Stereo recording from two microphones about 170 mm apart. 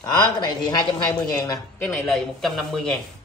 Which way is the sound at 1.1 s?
20° left (ahead or behind).